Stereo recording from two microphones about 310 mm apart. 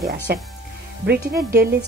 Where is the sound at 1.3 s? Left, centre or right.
Right.